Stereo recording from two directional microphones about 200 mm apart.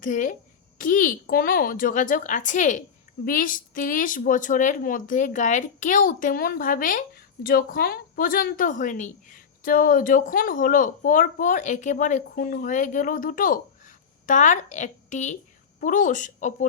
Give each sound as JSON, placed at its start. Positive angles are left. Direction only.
{"t": 0.0, "sound": "a woman's voice", "side_deg": 40}